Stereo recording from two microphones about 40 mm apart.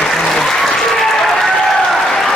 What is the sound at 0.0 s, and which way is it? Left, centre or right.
Applause, centre.